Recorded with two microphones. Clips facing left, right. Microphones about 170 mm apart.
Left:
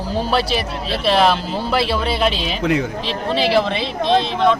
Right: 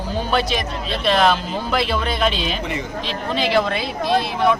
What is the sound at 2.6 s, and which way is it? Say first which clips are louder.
Speech: left 8 dB; 90° left.